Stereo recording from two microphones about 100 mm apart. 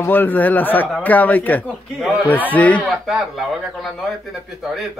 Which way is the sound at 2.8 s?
Centre (ahead or behind).